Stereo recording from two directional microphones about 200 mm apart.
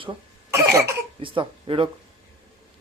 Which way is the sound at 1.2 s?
25° right (ahead or behind).